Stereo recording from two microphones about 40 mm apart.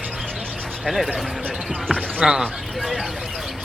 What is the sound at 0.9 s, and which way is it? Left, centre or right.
Speech, centre.